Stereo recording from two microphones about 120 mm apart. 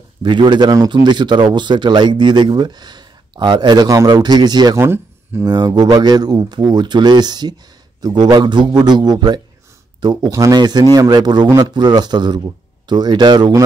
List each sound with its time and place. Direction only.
0.2 s a man's voice: 40° right (ahead or behind)
4.7 s speech: 20° right (ahead or behind)
5.4 s a man's voice: 30° right (ahead or behind)